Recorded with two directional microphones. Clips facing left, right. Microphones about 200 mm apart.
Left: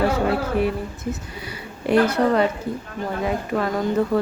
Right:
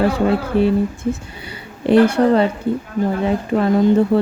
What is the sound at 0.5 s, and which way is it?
Speech, 30° right (ahead or behind).